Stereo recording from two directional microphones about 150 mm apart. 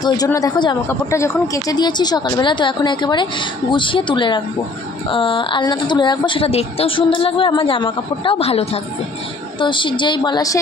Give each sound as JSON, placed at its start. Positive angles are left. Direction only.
{"t": 0.3, "sound": "speech", "side_deg": 25}
{"t": 0.9, "sound": "a woman's voice", "side_deg": 20}